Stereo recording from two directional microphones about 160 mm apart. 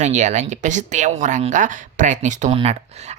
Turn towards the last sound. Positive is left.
turn(degrees=-40)  # may be behind; listen again after turning